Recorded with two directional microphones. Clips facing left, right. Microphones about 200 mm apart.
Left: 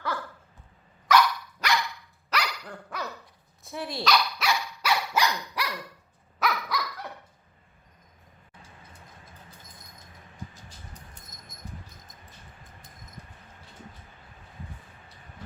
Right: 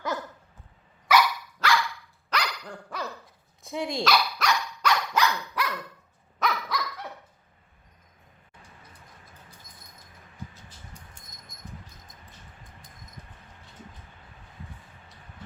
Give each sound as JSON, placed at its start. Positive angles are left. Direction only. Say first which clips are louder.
{"t": 0.0, "sound": "dog", "louder": "right 2 dB", "side_deg": -20}
{"t": 1.0, "sound": "dog", "louder": "left 1 dB", "side_deg": -10}
{"t": 1.5, "sound": "dog", "louder": "right 3 dB", "side_deg": 20}
{"t": 2.3, "sound": "dog", "louder": "even", "side_deg": 10}
{"t": 3.7, "sound": "speech", "louder": "right 4 dB", "side_deg": -15}
{"t": 4.0, "sound": "dog", "louder": "left 1 dB", "side_deg": 0}